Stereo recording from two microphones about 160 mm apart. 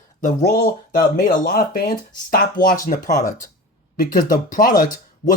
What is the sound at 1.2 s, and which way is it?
Speech, 65° left (ahead or behind).